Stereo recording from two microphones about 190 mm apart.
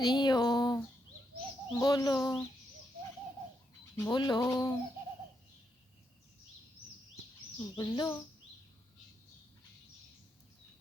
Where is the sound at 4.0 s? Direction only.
20° left (ahead or behind).